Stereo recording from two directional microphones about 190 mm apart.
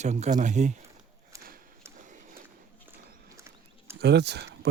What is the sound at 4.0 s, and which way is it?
Speech, 60° right (ahead or behind).